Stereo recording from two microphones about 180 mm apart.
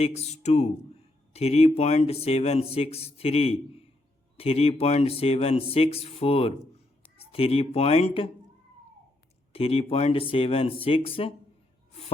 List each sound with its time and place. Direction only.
0.0 s a man's voice: 35° left (ahead or behind)
9.5 s a man's voice: 35° left (ahead or behind)